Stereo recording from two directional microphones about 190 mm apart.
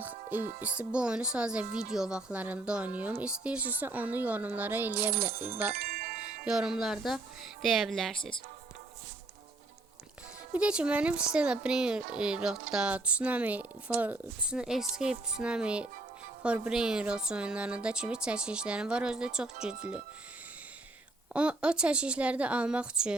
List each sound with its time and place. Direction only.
0.0 s music: 10° right (ahead or behind)
0.6 s speech: 5° right (ahead or behind)
5.7 s chime: 55° right (ahead or behind)
6.4 s speech: 5° right (ahead or behind)
10.5 s speech: 5° right (ahead or behind)
21.3 s speech: 5° right (ahead or behind)